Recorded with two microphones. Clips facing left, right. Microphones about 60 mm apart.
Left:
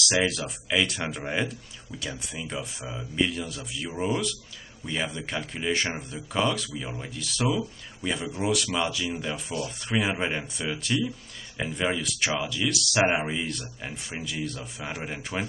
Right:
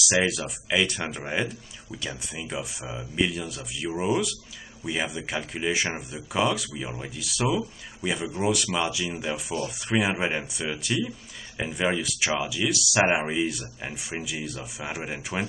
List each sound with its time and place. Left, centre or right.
0.0 s speech: centre